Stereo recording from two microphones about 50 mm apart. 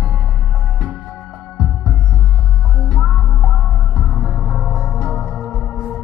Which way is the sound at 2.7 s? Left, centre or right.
Centre.